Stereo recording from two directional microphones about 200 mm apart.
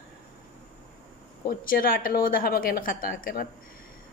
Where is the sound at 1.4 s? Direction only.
45° left (ahead or behind).